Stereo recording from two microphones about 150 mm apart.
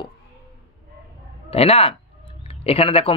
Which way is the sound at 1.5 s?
40° left (ahead or behind).